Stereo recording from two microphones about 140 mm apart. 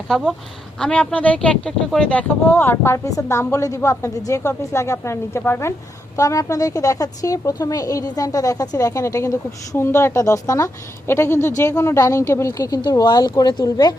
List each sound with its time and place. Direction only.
0.1 s a woman's voice: centre (ahead or behind); by 13.9 s 30° left (ahead or behind)